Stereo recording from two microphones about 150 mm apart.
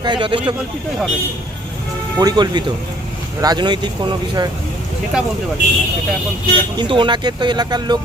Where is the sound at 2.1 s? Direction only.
25° right (ahead or behind).